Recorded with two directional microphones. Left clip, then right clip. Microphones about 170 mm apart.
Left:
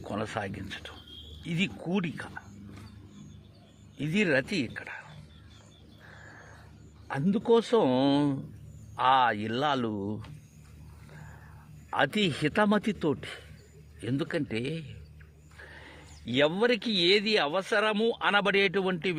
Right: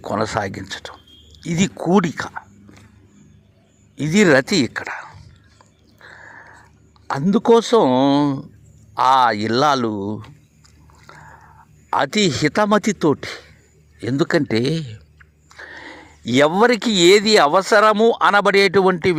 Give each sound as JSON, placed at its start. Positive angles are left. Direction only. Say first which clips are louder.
{"t": 0.0, "sound": "speech", "louder": "right 13 dB", "side_deg": -35}
{"t": 1.8, "sound": "speech", "louder": "right 16 dB", "side_deg": -50}
{"t": 3.9, "sound": "speech", "louder": "right 13 dB", "side_deg": -40}
{"t": 7.3, "sound": "speech", "louder": "right 11 dB", "side_deg": -50}
{"t": 11.9, "sound": "speech", "louder": "right 9 dB", "side_deg": -35}